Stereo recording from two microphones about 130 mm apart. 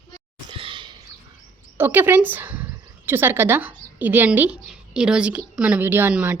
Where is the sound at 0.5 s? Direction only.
40° right (ahead or behind).